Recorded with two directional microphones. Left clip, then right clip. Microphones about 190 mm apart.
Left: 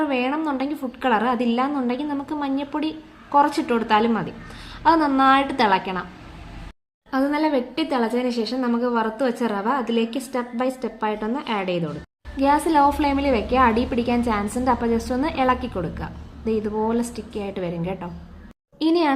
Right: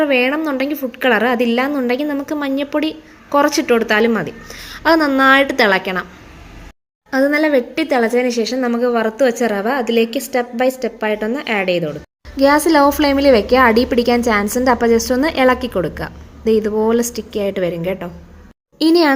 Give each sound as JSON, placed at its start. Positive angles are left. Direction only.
{"t": 0.0, "sound": "a woman's voice", "side_deg": -25}
{"t": 7.1, "sound": "a woman's voice", "side_deg": -30}
{"t": 18.8, "sound": "a child's voice", "side_deg": -35}